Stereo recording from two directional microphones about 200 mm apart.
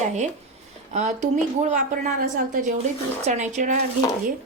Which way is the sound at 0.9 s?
35° right (ahead or behind).